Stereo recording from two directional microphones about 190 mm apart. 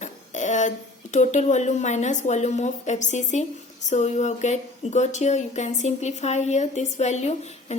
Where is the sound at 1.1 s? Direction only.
40° left (ahead or behind).